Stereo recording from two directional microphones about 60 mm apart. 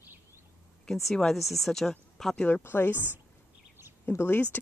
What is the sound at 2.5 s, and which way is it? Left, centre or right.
Speech, left.